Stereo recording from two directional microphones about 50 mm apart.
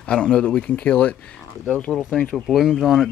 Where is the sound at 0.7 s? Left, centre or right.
Left.